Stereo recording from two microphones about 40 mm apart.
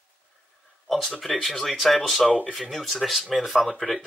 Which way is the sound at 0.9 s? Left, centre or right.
Centre.